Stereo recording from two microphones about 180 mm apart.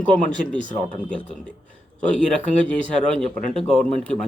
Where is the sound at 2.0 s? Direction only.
5° left (ahead or behind).